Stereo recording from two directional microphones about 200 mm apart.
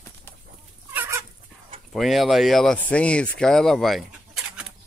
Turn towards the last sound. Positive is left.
turn(degrees=-5)  # may be behind; listen again after turning